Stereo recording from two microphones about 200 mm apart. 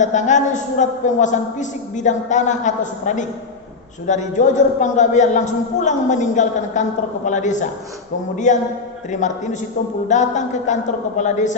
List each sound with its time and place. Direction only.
0.0 s a woman's voice: 35° left (ahead or behind)